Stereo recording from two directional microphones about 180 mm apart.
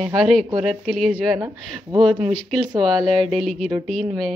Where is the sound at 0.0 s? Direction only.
Centre (ahead or behind).